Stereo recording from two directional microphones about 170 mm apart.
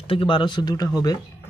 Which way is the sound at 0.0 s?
30° left (ahead or behind).